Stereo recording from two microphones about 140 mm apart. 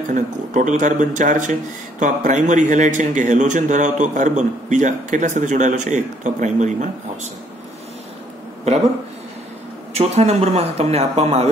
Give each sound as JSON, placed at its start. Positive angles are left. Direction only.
{"t": 0.1, "sound": "speech", "side_deg": -65}
{"t": 9.9, "sound": "speech", "side_deg": -50}